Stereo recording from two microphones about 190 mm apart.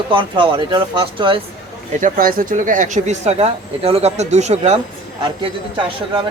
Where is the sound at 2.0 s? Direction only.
50° right (ahead or behind).